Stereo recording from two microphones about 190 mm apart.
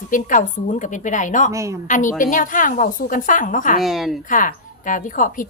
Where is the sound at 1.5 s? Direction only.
15° right (ahead or behind).